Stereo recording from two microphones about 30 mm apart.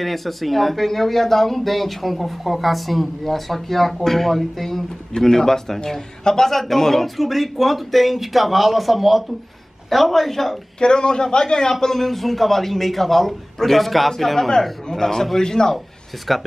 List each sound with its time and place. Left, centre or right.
0.0 s speech: centre
5.2 s a man's voice: centre
7.2 s speech: centre
10.8 s a man's voice: left
11.8 s a man's voice: centre
16.3 s speech: centre